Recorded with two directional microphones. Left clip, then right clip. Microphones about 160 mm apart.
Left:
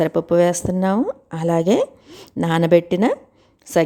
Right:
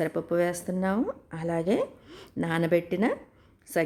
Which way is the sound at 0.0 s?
40° left (ahead or behind).